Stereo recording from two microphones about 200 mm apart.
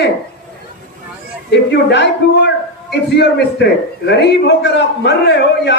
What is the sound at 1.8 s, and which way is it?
A man's voice, 60° left (ahead or behind).